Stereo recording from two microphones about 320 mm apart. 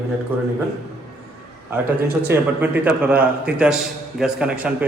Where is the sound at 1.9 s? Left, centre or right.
Right.